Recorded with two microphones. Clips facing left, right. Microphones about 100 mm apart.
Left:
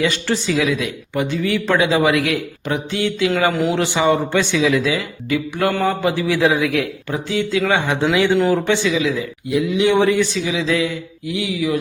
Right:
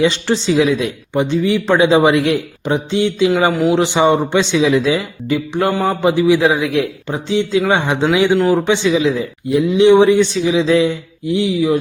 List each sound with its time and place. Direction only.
0.0 s speech: 25° right (ahead or behind)
8.9 s speech: 30° right (ahead or behind)